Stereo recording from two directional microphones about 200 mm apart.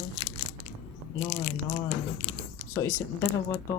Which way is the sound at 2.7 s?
15° left (ahead or behind).